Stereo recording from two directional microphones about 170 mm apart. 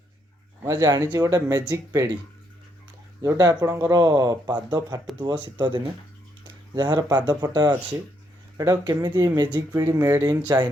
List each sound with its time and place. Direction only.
0.6 s speech: 20° right (ahead or behind)
3.2 s speech: 20° right (ahead or behind)